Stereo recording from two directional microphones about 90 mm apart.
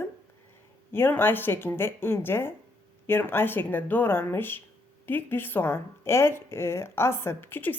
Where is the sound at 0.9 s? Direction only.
25° left (ahead or behind).